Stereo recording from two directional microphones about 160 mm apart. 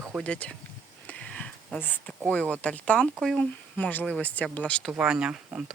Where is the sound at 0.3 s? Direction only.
5° left (ahead or behind).